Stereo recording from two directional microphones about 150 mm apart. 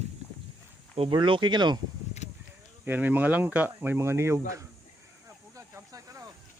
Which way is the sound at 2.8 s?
10° right (ahead or behind).